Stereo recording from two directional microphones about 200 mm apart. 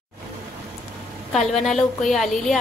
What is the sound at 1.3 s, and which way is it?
A woman's voice, centre (ahead or behind).